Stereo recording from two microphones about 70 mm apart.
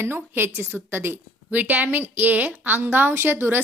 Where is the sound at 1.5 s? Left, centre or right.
Right.